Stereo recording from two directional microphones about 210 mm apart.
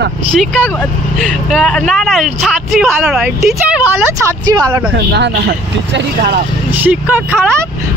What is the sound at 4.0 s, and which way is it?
Speech, 15° right (ahead or behind).